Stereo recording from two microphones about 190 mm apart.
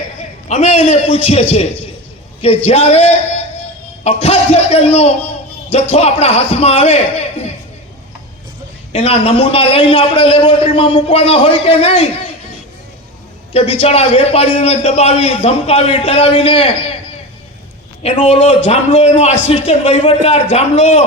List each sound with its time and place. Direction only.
0.2 s a man's voice: 35° left (ahead or behind)
2.6 s a man's voice: 30° left (ahead or behind)
8.9 s a man's voice: 30° left (ahead or behind)
13.5 s a man's voice: 30° left (ahead or behind)
18.0 s a man's voice: 30° left (ahead or behind)